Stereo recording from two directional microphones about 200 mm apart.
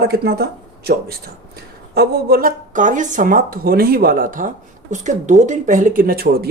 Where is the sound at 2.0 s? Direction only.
50° right (ahead or behind).